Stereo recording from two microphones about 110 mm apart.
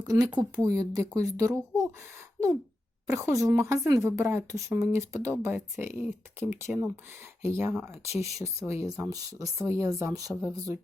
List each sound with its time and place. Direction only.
0.0 s speech: 30° right (ahead or behind)
3.1 s speech: 25° right (ahead or behind)
5.9 s speech: 90° left
6.4 s speech: 20° right (ahead or behind)